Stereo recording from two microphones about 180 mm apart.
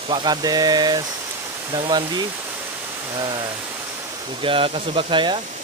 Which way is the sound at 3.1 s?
25° right (ahead or behind).